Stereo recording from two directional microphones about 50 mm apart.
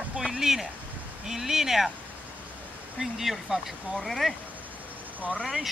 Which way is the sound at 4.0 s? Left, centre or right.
Centre.